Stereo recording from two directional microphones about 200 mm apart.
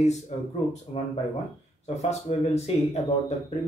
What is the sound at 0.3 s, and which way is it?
Speech, 35° left (ahead or behind).